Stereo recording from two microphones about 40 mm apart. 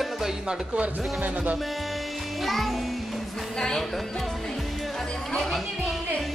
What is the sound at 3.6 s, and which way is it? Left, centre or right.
Music, centre.